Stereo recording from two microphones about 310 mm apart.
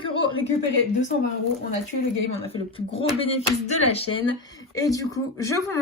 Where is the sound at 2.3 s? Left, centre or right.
Centre.